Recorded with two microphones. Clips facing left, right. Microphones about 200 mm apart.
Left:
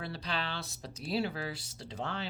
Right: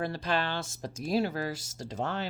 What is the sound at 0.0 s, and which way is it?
Speech, 50° right (ahead or behind).